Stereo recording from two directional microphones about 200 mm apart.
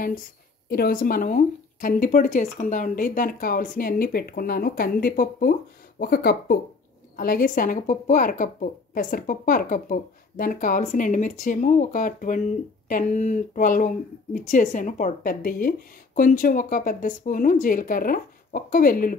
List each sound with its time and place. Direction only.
0.7 s speech: 50° left (ahead or behind)